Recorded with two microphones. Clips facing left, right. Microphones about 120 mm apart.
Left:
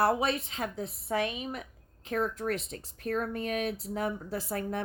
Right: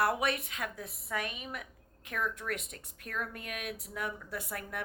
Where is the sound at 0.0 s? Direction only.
30° left (ahead or behind).